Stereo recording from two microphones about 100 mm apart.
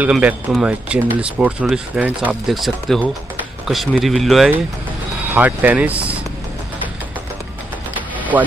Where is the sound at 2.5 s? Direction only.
Centre (ahead or behind).